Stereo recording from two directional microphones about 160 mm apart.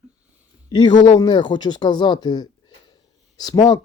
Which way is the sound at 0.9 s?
50° left (ahead or behind).